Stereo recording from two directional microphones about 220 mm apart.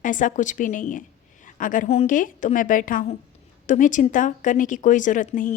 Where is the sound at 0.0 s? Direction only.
35° left (ahead or behind).